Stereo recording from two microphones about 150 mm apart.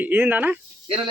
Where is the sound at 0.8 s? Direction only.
35° right (ahead or behind).